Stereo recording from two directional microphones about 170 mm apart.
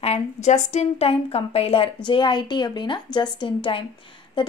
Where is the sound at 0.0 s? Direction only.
40° left (ahead or behind).